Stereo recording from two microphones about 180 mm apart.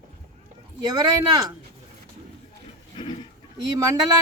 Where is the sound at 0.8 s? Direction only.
20° right (ahead or behind).